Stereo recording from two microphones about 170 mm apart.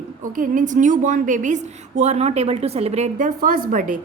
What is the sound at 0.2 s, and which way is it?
A woman's voice, 50° right (ahead or behind).